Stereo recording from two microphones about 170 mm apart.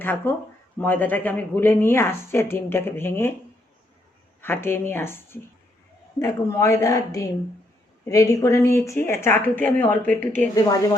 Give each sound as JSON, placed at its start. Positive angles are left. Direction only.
{"t": 0.0, "sound": "speech", "side_deg": 10}
{"t": 4.4, "sound": "a woman's voice", "side_deg": 10}
{"t": 10.5, "sound": "a woman's voice", "side_deg": 20}